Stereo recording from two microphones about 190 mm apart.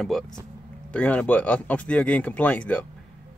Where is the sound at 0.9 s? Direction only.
10° left (ahead or behind).